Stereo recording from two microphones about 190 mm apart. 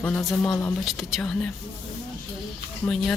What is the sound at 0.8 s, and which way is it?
Speech, centre (ahead or behind).